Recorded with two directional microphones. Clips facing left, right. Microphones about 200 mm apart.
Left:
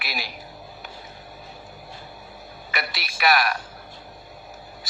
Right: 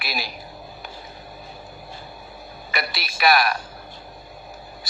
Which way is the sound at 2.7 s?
35° right (ahead or behind).